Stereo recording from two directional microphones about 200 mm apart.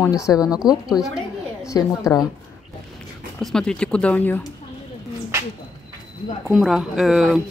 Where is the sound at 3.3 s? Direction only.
5° left (ahead or behind).